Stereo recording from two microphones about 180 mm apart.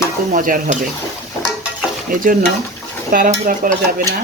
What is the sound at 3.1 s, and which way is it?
Stir, 50° right (ahead or behind).